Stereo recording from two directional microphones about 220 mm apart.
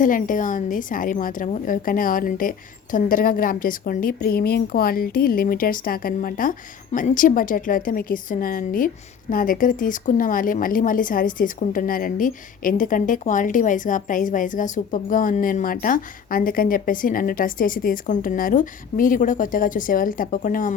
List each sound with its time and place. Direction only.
0.0 s a woman's voice: 35° left (ahead or behind)